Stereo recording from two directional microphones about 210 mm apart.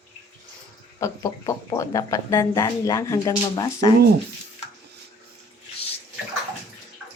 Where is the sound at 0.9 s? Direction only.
15° left (ahead or behind).